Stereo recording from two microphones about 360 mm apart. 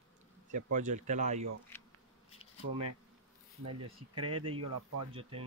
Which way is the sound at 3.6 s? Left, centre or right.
Right.